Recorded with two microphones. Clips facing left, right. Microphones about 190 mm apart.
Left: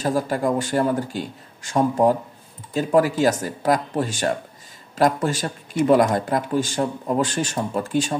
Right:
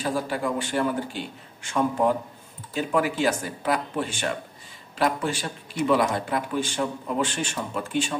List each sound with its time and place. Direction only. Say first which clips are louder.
0.0 s speech: left 5 dB; 40° left (ahead or behind)